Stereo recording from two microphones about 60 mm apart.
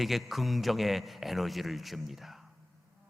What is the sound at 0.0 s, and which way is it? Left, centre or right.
A man's voice, centre.